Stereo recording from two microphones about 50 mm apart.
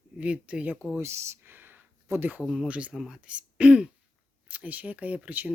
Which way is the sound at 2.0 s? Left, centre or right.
Right.